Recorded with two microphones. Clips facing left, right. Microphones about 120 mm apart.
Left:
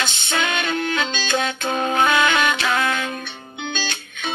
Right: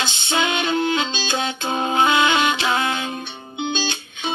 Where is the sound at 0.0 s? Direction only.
20° right (ahead or behind).